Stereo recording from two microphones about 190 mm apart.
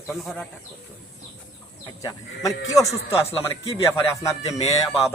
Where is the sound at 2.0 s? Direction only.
15° left (ahead or behind).